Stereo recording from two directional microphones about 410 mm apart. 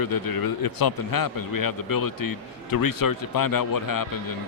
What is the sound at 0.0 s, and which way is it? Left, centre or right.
A man's voice, left.